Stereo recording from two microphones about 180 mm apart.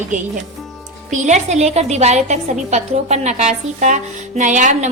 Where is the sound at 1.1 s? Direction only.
40° right (ahead or behind).